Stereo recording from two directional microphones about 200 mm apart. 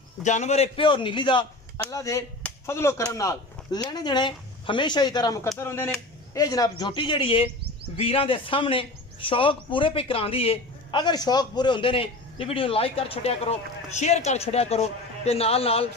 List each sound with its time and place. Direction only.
0.2 s speech: 35° left (ahead or behind)